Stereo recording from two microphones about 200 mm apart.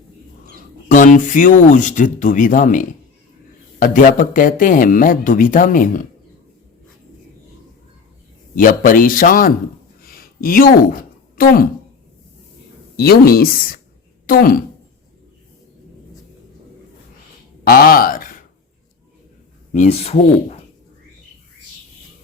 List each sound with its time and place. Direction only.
0.9 s speech: 40° left (ahead or behind)
8.5 s speech: 45° left (ahead or behind)
10.0 s a sound: 50° left (ahead or behind)
11.3 s speech: 50° left (ahead or behind)
13.0 s speech: 50° left (ahead or behind)
17.7 s speech: 50° left (ahead or behind)
19.7 s speech: 35° left (ahead or behind)